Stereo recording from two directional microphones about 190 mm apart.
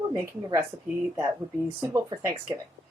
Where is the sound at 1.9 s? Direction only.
15° right (ahead or behind).